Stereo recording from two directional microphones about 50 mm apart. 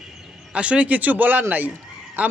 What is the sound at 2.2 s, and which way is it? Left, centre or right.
Speech, right.